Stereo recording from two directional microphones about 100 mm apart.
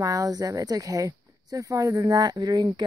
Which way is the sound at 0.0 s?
35° right (ahead or behind).